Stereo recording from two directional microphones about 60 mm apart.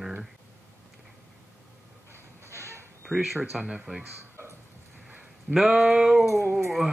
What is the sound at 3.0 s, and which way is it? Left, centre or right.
Speech, centre.